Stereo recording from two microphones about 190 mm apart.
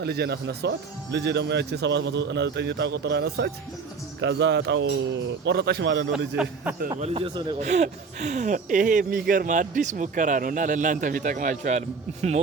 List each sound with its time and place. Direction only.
0.0 s a man's voice: 60° right (ahead or behind)
6.1 s a man's voice: 5° right (ahead or behind)
6.9 s a man's voice: 30° right (ahead or behind)